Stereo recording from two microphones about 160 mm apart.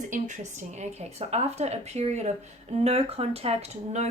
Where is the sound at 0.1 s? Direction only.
50° right (ahead or behind).